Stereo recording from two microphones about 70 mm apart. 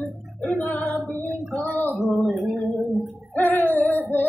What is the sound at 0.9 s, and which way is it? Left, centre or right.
Female singing, right.